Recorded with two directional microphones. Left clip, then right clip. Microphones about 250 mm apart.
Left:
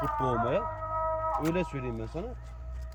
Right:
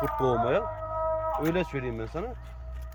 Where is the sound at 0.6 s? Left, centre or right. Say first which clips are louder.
Right 1 dB; right.